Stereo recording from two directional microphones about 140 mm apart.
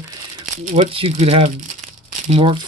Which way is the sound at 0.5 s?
65° right (ahead or behind).